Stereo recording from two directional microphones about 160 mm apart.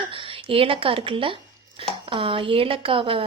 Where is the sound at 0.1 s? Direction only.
35° right (ahead or behind).